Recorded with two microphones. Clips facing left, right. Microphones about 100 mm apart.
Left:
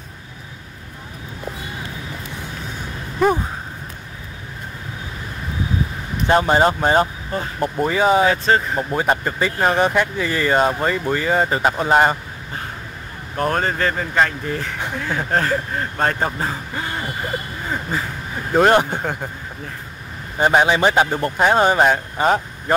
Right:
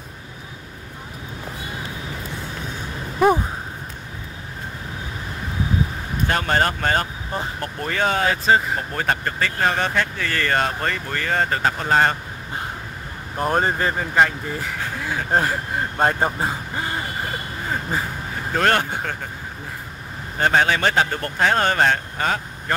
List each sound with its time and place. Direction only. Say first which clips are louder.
6.2 s speech: left 6 dB; 15° left (ahead or behind)
8.3 s speech: left 1 dB; 5° right (ahead or behind)
8.7 s speech: left 4 dB; 15° left (ahead or behind)
13.4 s speech: left 1 dB; 15° right (ahead or behind)
18.5 s speech: left 6 dB; 15° left (ahead or behind)
20.3 s speech: left 3 dB; 15° left (ahead or behind)